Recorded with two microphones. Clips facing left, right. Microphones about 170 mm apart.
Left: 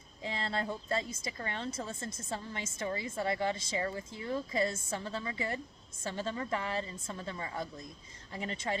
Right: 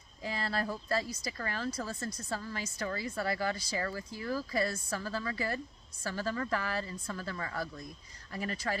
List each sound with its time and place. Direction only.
0.2 s speech: 25° left (ahead or behind)